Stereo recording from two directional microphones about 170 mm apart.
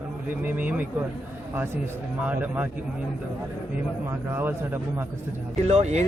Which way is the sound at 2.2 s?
10° right (ahead or behind).